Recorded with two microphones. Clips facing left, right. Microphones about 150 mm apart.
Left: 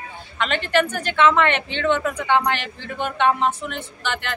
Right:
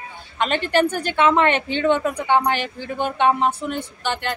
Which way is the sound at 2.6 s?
40° right (ahead or behind).